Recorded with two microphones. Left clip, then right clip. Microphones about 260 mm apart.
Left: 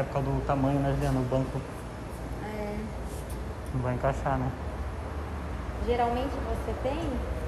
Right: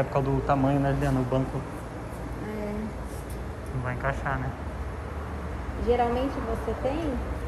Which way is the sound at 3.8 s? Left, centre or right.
Left.